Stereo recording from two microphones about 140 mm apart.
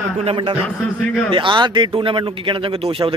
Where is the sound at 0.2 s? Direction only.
40° right (ahead or behind).